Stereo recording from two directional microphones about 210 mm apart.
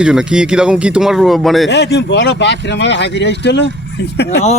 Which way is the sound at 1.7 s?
55° left (ahead or behind).